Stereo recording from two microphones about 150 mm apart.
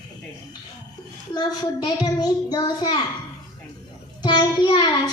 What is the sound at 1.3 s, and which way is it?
A child's voice, 25° left (ahead or behind).